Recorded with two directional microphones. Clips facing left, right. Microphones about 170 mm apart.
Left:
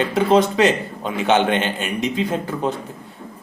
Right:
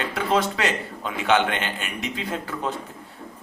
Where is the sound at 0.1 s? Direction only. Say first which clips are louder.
Left 6 dB; 20° left (ahead or behind).